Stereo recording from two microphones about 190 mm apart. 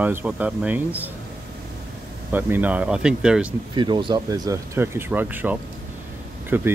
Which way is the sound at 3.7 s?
25° right (ahead or behind).